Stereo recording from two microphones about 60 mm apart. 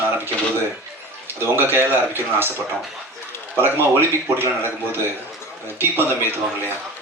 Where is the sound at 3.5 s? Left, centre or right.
Right.